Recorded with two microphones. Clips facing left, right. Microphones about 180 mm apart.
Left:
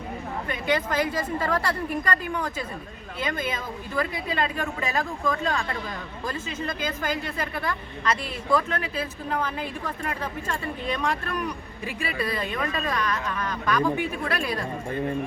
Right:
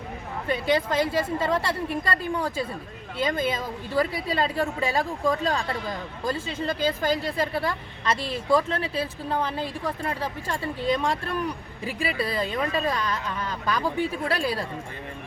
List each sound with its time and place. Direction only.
0.4 s a woman's voice: 30° right (ahead or behind)